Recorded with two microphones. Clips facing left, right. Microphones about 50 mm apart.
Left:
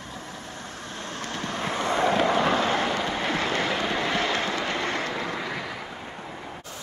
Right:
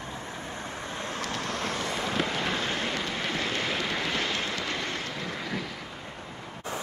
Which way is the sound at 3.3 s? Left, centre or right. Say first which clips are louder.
Left 4 dB; left.